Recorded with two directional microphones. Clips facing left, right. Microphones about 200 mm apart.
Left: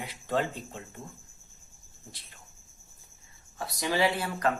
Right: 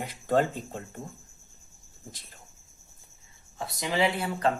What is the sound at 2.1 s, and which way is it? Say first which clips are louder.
Speech: right 3 dB; 45° right (ahead or behind).